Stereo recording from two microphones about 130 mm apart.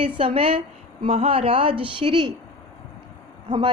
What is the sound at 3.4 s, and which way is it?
Speech, 35° right (ahead or behind).